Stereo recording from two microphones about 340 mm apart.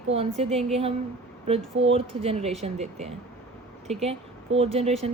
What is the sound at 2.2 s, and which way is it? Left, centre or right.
Speech, centre.